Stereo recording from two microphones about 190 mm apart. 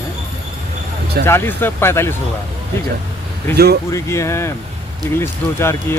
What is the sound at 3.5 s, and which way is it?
Speech, 55° right (ahead or behind).